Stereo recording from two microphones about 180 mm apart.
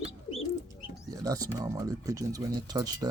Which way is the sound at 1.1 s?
20° right (ahead or behind).